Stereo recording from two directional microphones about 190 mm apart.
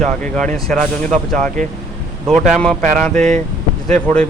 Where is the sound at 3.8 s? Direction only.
5° left (ahead or behind).